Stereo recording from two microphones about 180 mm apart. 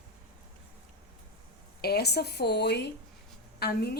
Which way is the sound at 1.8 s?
65° left (ahead or behind).